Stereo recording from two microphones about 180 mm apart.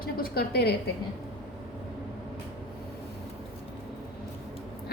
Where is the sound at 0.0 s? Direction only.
55° left (ahead or behind).